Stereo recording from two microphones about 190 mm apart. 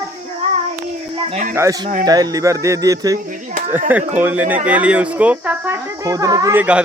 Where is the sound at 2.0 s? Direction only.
20° right (ahead or behind).